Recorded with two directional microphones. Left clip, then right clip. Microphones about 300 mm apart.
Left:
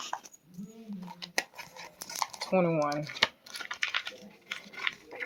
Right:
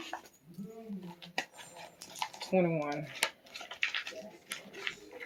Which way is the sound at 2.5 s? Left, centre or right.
Left.